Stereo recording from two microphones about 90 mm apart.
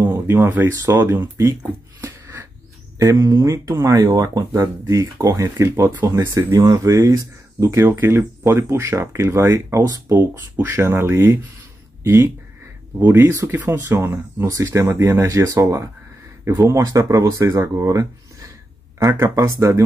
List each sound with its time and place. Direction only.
0.0 s speech: 25° right (ahead or behind)
2.0 s a sound: 30° right (ahead or behind)
3.0 s speech: 40° right (ahead or behind)